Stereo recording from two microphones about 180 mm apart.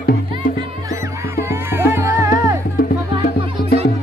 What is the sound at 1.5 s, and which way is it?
Music, 15° right (ahead or behind).